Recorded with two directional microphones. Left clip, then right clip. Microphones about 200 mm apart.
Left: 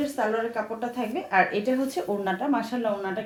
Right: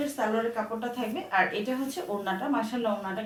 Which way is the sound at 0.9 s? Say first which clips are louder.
Left 4 dB; 45° left (ahead or behind).